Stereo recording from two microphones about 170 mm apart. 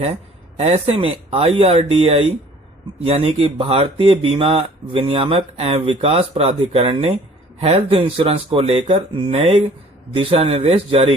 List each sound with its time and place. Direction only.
0.5 s speech: 35° right (ahead or behind)